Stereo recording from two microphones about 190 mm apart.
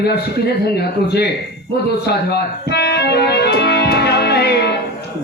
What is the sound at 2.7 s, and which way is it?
Music, 60° left (ahead or behind).